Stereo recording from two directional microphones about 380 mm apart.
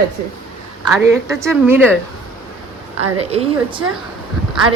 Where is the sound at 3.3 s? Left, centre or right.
Centre.